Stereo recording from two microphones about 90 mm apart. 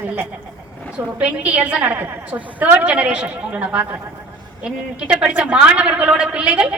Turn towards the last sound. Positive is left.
turn(degrees=-10)  # may be behind; listen again after turning